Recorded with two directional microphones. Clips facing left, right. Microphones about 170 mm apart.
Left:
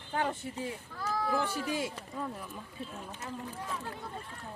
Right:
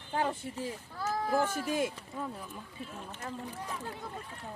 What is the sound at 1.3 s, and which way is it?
Speech, 45° right (ahead or behind).